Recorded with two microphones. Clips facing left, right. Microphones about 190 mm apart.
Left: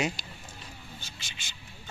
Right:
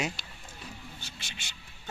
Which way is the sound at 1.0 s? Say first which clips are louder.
Right 1 dB; 65° right (ahead or behind).